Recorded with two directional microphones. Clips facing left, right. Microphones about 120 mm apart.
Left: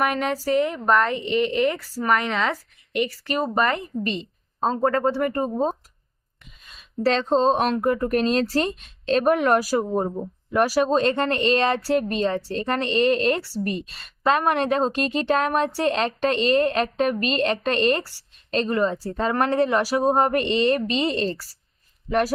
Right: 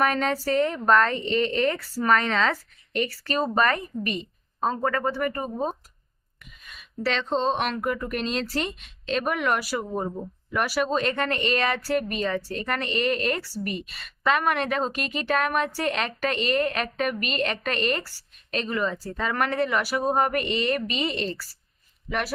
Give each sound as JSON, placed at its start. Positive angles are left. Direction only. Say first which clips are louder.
{"t": 0.0, "sound": "a woman's voice", "louder": "even", "side_deg": 15}
{"t": 7.0, "sound": "a woman's voice", "louder": "left 6 dB", "side_deg": 35}
{"t": 7.9, "sound": "a woman's voice", "louder": "left 7 dB", "side_deg": 45}